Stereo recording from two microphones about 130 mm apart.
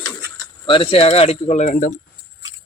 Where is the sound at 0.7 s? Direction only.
45° left (ahead or behind); by 1.9 s 80° left.